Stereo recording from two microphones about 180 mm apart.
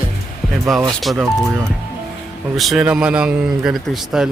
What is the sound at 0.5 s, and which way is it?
Speech, centre (ahead or behind).